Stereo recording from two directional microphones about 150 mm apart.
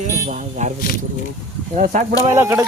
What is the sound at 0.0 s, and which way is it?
Speech, 50° right (ahead or behind).